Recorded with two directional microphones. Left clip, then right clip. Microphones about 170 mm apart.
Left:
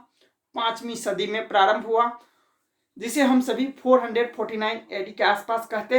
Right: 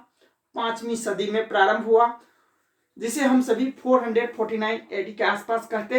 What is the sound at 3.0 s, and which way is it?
Speech, 30° left (ahead or behind).